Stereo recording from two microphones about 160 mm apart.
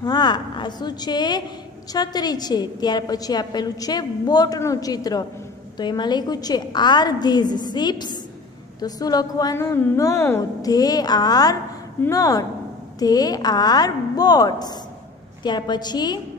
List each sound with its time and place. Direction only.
0.0 s a woman's voice: 25° left (ahead or behind)